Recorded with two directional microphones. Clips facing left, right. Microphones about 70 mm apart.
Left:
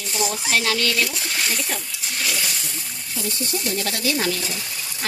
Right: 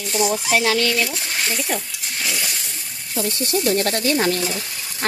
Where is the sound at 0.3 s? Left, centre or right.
Centre.